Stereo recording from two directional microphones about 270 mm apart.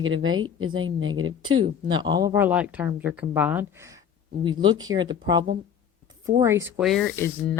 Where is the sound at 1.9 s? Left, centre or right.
Centre.